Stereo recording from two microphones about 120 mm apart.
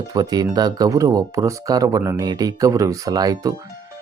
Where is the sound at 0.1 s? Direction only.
35° right (ahead or behind).